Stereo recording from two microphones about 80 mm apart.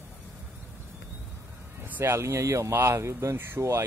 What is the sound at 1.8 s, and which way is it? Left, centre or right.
Speech, right.